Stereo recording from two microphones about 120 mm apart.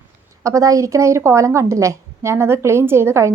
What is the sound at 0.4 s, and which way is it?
A woman's voice, 25° right (ahead or behind).